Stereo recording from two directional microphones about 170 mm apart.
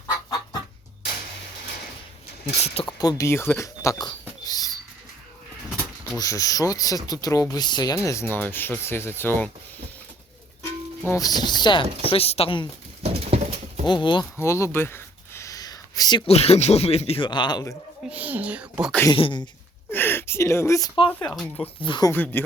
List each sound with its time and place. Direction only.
2.6 s speech: 35° left (ahead or behind)
3.0 s speech: 20° left (ahead or behind)
6.1 s speech: 20° left (ahead or behind)
11.1 s speech: 20° left (ahead or behind)
13.0 s dog: 40° right (ahead or behind)
13.8 s speech: 25° left (ahead or behind)
14.3 s speech: 15° left (ahead or behind)
18.1 s speech: 10° right (ahead or behind)
19.1 s speech: 30° left (ahead or behind)
19.9 s speech: 10° left (ahead or behind)
21.1 s speech: 10° left (ahead or behind)
21.8 s speech: 30° left (ahead or behind)
22.1 s speech: 10° left (ahead or behind)